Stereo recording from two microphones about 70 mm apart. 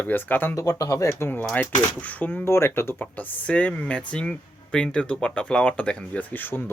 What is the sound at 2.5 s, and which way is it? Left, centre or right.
Speech, left.